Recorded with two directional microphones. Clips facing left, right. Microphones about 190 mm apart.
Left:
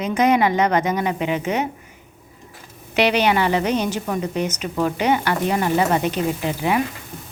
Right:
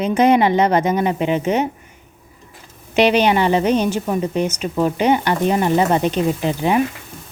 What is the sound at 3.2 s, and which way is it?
A woman's voice, 20° right (ahead or behind).